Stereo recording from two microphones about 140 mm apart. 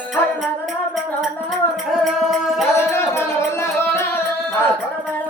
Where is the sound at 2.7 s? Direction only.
20° left (ahead or behind).